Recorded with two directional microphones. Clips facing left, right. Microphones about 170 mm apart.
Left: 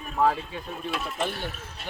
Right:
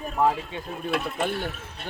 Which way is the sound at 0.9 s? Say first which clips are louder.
Right 3 dB; 60° right (ahead or behind).